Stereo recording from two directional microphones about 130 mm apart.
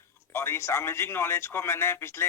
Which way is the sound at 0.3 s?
20° left (ahead or behind).